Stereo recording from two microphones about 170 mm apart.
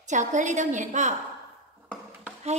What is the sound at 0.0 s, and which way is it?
A woman's voice, 45° right (ahead or behind).